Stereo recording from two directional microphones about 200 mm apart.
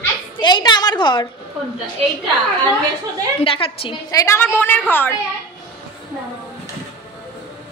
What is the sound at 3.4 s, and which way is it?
A woman's voice, 30° left (ahead or behind).